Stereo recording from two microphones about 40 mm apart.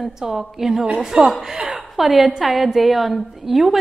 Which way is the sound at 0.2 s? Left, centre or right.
Centre.